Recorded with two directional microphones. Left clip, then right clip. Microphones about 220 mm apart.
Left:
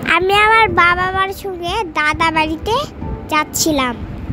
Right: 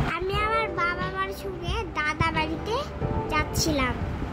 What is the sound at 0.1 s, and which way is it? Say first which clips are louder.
Speech: left 17 dB; 40° left (ahead or behind).